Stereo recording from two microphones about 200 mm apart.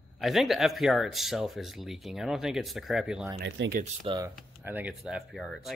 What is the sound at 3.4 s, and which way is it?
Speech, 60° right (ahead or behind).